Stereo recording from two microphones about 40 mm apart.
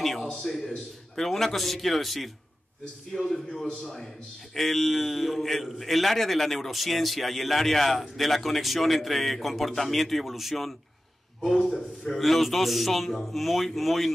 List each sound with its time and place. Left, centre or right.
0.0 s a sound: centre
0.3 s a man's voice: centre
4.6 s a man's voice: centre
12.1 s a man's voice: centre